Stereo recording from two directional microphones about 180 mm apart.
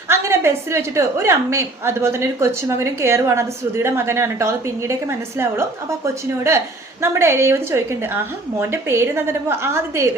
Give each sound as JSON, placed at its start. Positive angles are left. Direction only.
{"t": 0.1, "sound": "a woman's voice", "side_deg": -15}
{"t": 7.0, "sound": "a woman's voice", "side_deg": -15}